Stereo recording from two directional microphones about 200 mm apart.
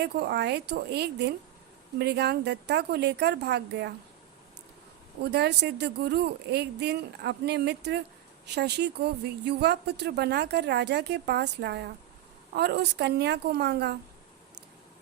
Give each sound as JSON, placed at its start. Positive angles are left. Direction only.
{"t": 0.0, "sound": "speech", "side_deg": -55}
{"t": 5.2, "sound": "speech", "side_deg": -55}